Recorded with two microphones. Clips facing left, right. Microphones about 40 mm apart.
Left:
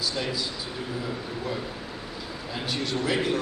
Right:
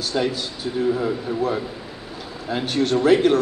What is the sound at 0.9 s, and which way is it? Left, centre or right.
A man's voice, right.